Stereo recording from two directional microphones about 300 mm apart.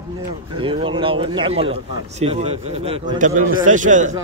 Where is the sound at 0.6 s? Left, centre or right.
Centre.